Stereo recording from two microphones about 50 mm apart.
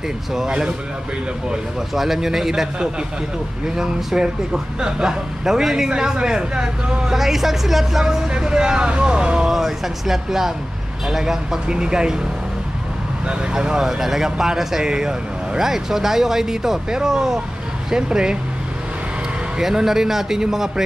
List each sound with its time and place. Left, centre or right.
0.5 s speech: centre
2.0 s speech: centre
9.5 s speech: centre
13.3 s speech: centre
19.6 s speech: centre